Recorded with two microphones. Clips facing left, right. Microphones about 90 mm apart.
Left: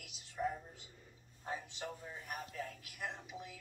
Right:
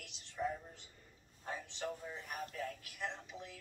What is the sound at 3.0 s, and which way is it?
Music, 5° left (ahead or behind).